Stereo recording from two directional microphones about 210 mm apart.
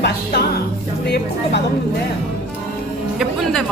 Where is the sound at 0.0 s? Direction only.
50° left (ahead or behind).